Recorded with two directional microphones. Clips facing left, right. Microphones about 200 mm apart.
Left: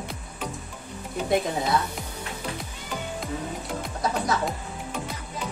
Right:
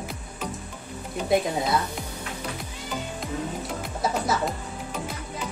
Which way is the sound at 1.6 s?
Centre (ahead or behind).